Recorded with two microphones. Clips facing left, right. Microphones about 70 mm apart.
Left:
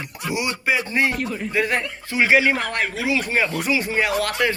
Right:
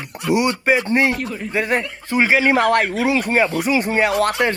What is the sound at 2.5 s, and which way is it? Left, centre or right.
Speech, right.